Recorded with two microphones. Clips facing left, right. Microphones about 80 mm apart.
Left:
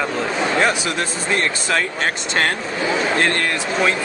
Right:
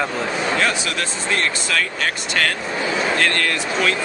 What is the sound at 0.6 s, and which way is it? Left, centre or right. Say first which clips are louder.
Speech: left 2 dB; left.